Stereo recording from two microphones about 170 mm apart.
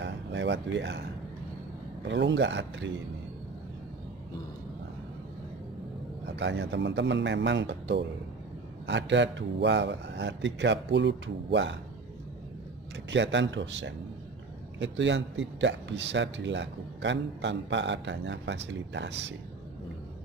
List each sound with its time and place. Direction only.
0.0 s speech: 90° right
2.0 s a man's voice: 90° right
6.3 s a man's voice: 90° right
13.1 s a man's voice: 90° right